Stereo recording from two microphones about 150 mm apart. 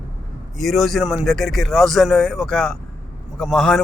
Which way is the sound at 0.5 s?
Centre (ahead or behind).